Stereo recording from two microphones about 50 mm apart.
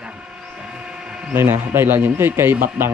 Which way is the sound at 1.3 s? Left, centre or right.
Right.